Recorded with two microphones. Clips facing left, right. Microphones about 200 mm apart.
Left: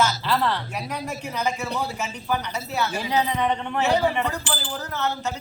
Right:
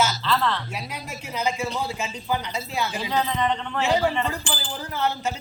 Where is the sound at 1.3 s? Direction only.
10° right (ahead or behind).